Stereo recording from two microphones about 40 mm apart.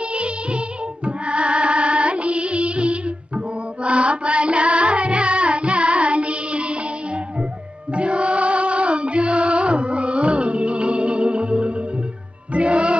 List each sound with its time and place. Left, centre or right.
0.1 s music: right
7.9 s music: right